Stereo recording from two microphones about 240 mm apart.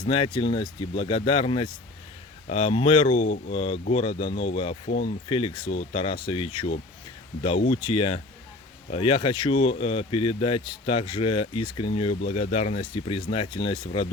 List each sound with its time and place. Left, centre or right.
0.0 s speech: left